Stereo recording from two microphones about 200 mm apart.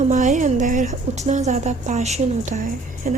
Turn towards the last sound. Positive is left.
turn(degrees=-40)  # may be behind; listen again after turning